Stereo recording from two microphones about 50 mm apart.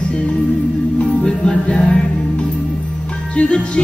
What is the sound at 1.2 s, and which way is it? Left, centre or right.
Music, centre.